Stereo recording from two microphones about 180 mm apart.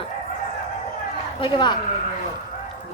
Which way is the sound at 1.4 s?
25° left (ahead or behind).